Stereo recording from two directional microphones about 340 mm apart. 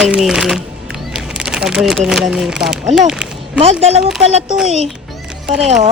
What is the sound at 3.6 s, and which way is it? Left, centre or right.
Speech, centre.